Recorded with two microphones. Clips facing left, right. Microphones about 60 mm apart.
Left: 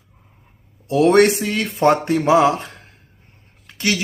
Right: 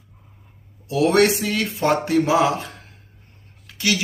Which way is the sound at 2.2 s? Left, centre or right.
Left.